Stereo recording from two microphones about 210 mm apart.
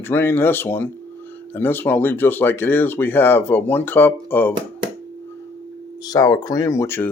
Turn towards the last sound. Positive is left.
turn(degrees=10)  # may be behind; listen again after turning